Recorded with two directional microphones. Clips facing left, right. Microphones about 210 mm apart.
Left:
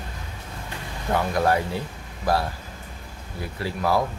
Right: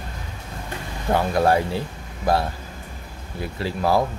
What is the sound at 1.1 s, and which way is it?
Speech, 30° right (ahead or behind).